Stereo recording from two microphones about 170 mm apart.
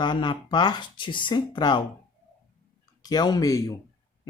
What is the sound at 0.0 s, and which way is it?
Speech, 25° left (ahead or behind).